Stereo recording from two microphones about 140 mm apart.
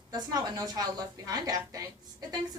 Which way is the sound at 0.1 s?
30° right (ahead or behind).